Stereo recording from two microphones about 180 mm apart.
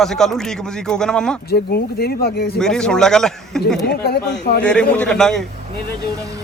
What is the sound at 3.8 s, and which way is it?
Speech, 60° left (ahead or behind).